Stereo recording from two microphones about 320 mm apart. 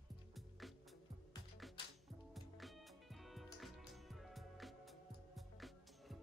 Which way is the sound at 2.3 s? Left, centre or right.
Centre.